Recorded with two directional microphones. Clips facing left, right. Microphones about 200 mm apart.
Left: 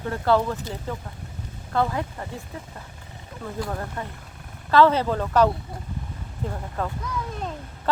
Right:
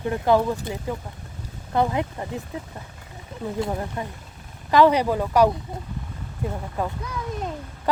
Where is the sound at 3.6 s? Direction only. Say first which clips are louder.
Right 2 dB; 20° right (ahead or behind).